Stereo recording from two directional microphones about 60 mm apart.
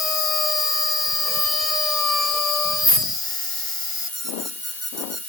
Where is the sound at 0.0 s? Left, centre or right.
Centre.